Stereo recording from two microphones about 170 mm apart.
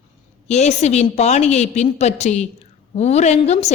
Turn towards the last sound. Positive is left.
turn(degrees=40)  # may be behind; listen again after turning